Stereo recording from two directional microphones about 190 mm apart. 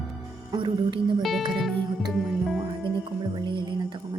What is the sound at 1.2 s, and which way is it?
Music, centre (ahead or behind).